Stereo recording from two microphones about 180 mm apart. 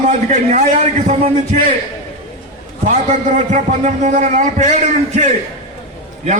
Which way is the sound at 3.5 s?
45° right (ahead or behind).